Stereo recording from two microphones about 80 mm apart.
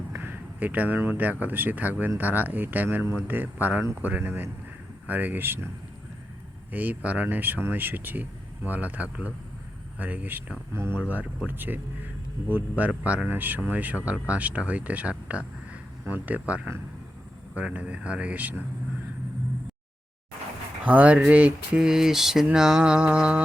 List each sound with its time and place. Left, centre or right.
0.1 s speech: right
6.7 s speech: centre
20.8 s speech: right